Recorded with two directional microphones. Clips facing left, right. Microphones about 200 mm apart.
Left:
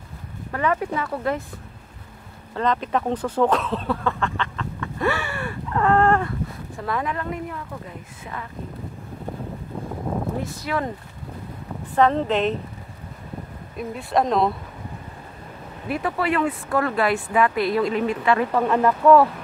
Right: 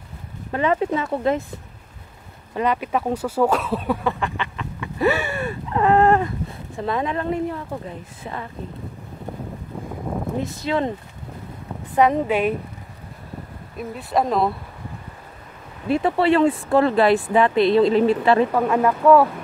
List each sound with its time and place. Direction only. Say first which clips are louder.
0.5 s speech: right 3 dB; 20° right (ahead or behind)
2.5 s speech: right 1 dB; 10° right (ahead or behind); by 8.5 s 30° right (ahead or behind)
10.4 s speech: right 4 dB; 25° right (ahead or behind)
11.9 s speech: right 1 dB; 15° right (ahead or behind)
13.7 s speech: even; 5° right (ahead or behind)
15.9 s speech: right 6 dB; 25° right (ahead or behind)
18.5 s speech: right 1 dB; 5° right (ahead or behind)